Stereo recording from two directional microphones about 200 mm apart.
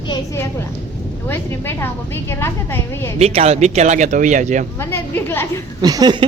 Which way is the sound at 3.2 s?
30° right (ahead or behind).